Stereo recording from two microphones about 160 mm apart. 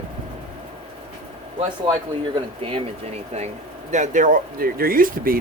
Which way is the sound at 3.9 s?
50° right (ahead or behind).